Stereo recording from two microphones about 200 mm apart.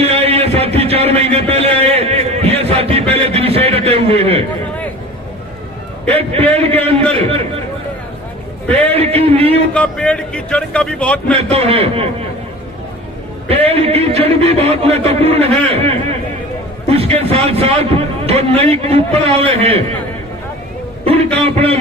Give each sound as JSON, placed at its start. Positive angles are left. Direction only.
{"t": 0.0, "sound": "a sound", "side_deg": -30}
{"t": 6.1, "sound": "a man's voice", "side_deg": -30}
{"t": 8.9, "sound": "a man's voice", "side_deg": -30}
{"t": 9.7, "sound": "speech", "side_deg": 5}
{"t": 11.5, "sound": "a man's voice", "side_deg": -30}
{"t": 13.5, "sound": "a man's voice", "side_deg": -30}
{"t": 21.4, "sound": "a man's voice", "side_deg": -30}